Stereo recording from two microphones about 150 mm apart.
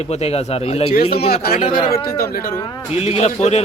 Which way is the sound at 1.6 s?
40° left (ahead or behind).